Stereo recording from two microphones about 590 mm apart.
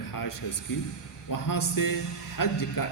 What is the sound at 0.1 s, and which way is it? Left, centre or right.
A man's voice, left.